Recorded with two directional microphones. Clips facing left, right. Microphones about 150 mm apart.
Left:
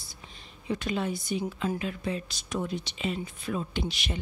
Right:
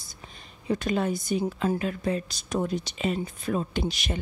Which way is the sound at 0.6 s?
40° right (ahead or behind).